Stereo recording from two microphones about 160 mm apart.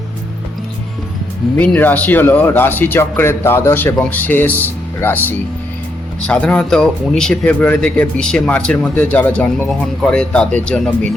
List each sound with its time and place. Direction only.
1.5 s speech: 10° left (ahead or behind)